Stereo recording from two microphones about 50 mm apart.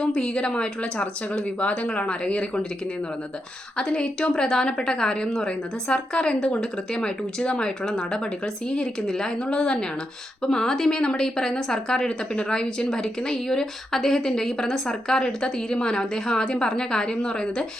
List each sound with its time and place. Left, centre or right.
0.0 s speech: centre
3.8 s speech: centre